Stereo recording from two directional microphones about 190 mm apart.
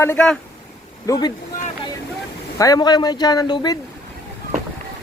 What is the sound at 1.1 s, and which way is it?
Speech, 20° left (ahead or behind).